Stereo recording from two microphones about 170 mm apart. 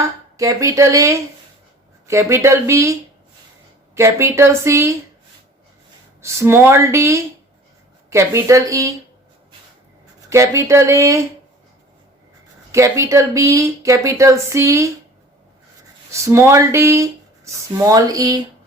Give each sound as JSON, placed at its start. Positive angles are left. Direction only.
{"t": 0.0, "sound": "speech", "side_deg": -20}
{"t": 6.2, "sound": "speech", "side_deg": -15}
{"t": 10.2, "sound": "speech", "side_deg": -15}
{"t": 12.7, "sound": "speech", "side_deg": -15}
{"t": 16.1, "sound": "speech", "side_deg": -15}